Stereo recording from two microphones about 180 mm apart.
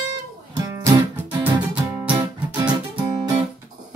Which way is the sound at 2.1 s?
25° right (ahead or behind).